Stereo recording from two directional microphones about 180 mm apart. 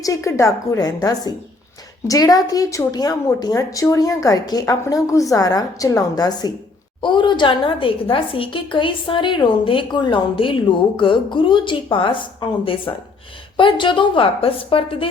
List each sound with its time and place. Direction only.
0.0 s a woman's voice: 15° left (ahead or behind)